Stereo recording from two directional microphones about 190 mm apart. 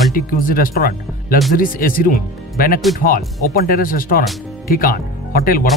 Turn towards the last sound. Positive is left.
turn(degrees=50)  # may be behind; listen again after turning